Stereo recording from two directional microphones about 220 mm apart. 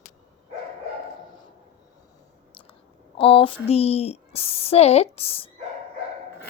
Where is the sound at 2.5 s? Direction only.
25° left (ahead or behind).